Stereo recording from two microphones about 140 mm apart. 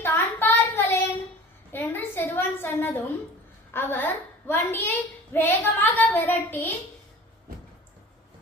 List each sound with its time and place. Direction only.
0.0 s child singing: 15° left (ahead or behind)
1.7 s a sound: 15° left (ahead or behind)
3.7 s a woman's voice: 15° left (ahead or behind)